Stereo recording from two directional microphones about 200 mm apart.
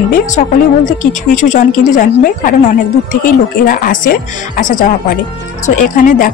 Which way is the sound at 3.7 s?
45° left (ahead or behind).